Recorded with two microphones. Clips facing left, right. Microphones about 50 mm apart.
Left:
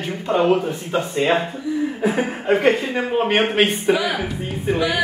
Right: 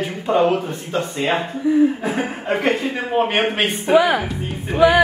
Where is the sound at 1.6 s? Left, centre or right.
Right.